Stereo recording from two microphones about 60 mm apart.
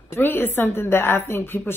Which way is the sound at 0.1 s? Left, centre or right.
Left.